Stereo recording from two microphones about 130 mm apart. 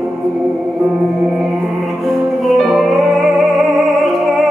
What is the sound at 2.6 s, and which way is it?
Music, centre (ahead or behind).